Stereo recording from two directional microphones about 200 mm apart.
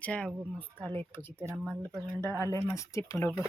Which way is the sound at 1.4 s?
5° right (ahead or behind).